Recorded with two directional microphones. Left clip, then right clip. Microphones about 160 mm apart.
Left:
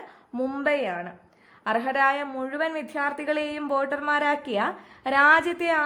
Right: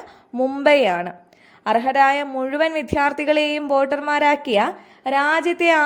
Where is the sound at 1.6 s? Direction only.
20° right (ahead or behind).